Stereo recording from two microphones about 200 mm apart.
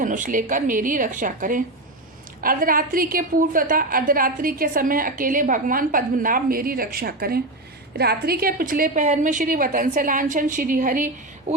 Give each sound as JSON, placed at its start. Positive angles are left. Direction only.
{"t": 0.0, "sound": "a woman's voice", "side_deg": -40}